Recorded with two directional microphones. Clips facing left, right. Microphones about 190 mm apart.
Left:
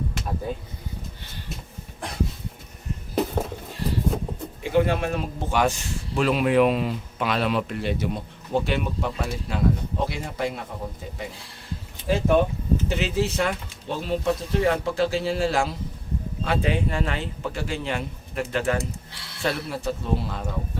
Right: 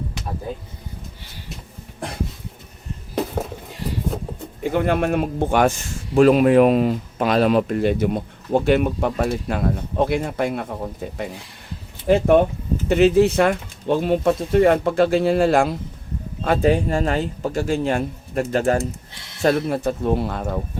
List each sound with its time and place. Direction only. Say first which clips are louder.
4.6 s a man's voice: right 2 dB; 55° right (ahead or behind)
16.4 s a man's voice: right 7 dB; 45° right (ahead or behind)